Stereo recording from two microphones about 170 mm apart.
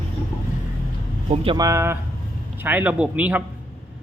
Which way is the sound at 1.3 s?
35° right (ahead or behind).